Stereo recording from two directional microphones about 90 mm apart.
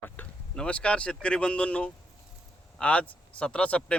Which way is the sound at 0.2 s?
20° left (ahead or behind).